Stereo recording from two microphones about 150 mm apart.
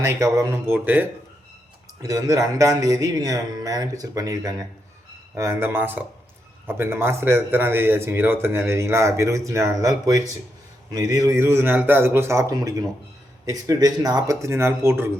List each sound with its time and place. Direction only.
0.0 s a man's voice: 20° right (ahead or behind)